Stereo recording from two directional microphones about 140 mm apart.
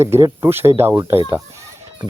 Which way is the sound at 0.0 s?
20° right (ahead or behind).